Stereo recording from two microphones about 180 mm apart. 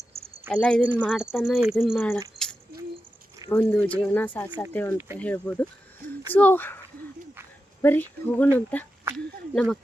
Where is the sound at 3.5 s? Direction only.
10° left (ahead or behind).